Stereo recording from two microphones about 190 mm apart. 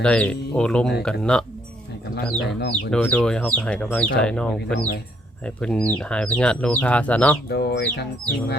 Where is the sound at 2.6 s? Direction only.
60° left (ahead or behind).